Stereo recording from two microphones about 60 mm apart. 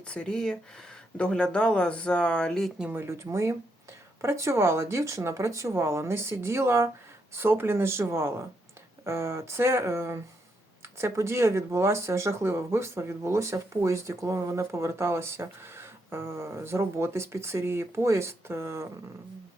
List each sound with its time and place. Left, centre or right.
0.0 s speech: centre
2.9 s speech: right
5.7 s speech: right
7.3 s speech: right